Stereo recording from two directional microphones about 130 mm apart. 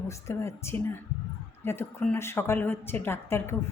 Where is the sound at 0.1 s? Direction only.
20° left (ahead or behind).